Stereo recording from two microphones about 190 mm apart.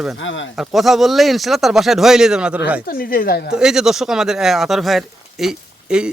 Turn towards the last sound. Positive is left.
turn(degrees=-5)  # may be behind; listen again after turning